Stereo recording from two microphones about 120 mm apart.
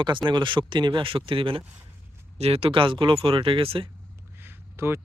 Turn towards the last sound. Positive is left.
turn(degrees=-20)  # may be behind; listen again after turning